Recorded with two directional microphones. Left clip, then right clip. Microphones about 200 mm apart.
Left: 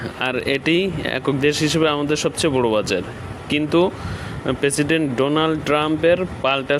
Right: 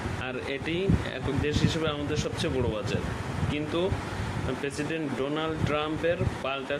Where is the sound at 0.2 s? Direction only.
50° left (ahead or behind).